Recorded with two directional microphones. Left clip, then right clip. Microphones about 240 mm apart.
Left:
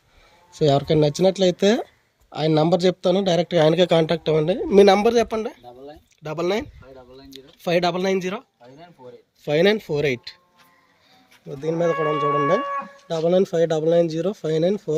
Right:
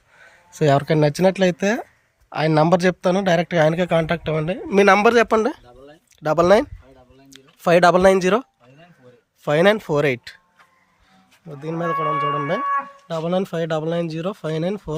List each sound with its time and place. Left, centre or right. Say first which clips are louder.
0.6 s a man's voice: right 1 dB; centre; by 8.4 s right
9.4 s speech: right 2 dB; centre
11.6 s a man's voice: left 4 dB; centre
13.1 s speech: left 6 dB; centre